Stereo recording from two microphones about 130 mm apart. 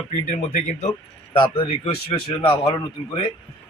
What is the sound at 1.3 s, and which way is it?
Speech, 40° left (ahead or behind).